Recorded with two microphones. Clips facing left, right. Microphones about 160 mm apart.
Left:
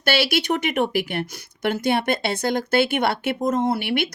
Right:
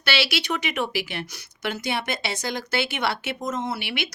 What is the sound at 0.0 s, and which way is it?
Speech, 50° left (ahead or behind).